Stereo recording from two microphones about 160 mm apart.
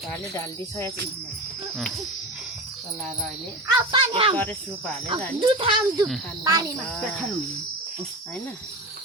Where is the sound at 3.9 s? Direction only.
35° right (ahead or behind).